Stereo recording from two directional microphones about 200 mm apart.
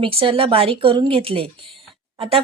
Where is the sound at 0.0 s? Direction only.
25° right (ahead or behind).